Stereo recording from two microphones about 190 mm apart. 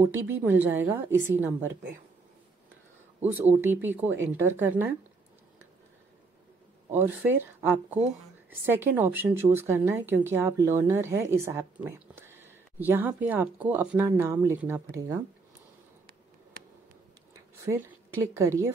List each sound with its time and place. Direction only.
0.0 s speech: 10° right (ahead or behind)
3.2 s speech: 10° right (ahead or behind)
6.9 s speech: 10° right (ahead or behind)
18.3 s speech: 15° right (ahead or behind)